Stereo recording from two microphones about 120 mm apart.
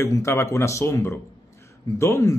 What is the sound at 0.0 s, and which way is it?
Speech, 25° left (ahead or behind).